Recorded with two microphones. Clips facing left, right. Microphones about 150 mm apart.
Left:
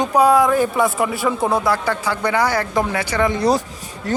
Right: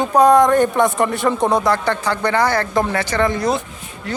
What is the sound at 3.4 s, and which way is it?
Speech, 35° left (ahead or behind).